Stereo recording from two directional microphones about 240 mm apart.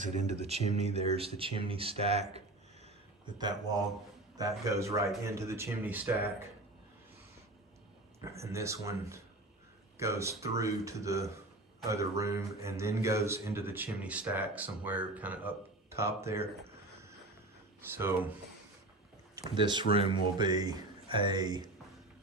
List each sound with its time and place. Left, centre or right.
0.0 s speech: right; by 6.1 s centre
8.5 s speech: centre
17.7 s speech: centre
19.4 s speech: centre